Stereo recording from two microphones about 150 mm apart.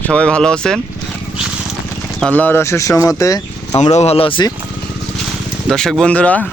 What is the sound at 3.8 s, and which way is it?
Speech, 50° left (ahead or behind).